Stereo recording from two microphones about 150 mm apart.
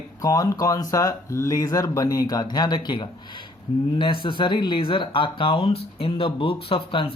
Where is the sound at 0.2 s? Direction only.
25° left (ahead or behind).